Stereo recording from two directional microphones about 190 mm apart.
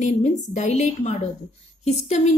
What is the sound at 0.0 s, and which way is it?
A woman's voice, 40° left (ahead or behind).